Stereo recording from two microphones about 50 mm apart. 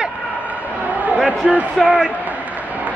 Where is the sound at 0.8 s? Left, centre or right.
Right.